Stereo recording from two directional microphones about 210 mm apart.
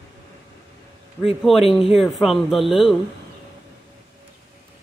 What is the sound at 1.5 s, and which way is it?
Speech, centre (ahead or behind).